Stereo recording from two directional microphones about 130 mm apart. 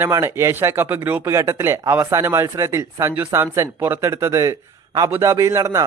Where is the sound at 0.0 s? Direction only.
20° right (ahead or behind).